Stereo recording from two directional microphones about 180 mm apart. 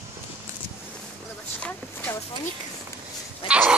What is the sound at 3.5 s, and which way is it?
Goat, 5° right (ahead or behind).